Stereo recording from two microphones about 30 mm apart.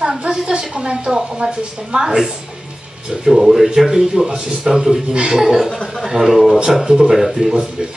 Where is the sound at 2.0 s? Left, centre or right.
Centre.